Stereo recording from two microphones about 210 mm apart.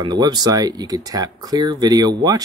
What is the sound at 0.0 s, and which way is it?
Speech, 20° right (ahead or behind).